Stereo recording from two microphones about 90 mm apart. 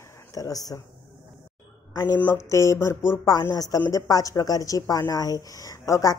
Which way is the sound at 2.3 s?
35° left (ahead or behind).